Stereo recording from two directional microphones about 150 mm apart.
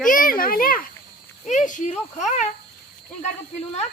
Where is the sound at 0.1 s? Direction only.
65° left (ahead or behind).